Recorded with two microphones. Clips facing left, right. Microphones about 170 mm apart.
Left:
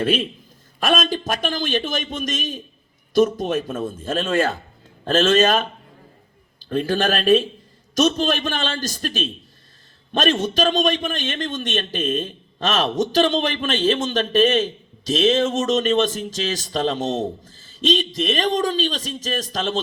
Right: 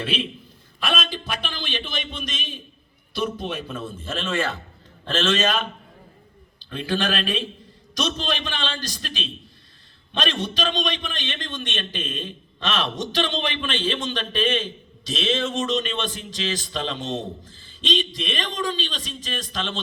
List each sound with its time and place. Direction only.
0.0 s a man's voice: 45° left (ahead or behind)